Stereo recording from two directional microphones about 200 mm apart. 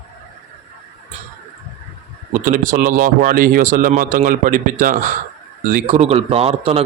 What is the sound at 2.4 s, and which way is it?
A man's voice, 40° right (ahead or behind).